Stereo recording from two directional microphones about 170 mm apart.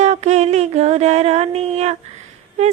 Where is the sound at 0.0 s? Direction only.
40° right (ahead or behind).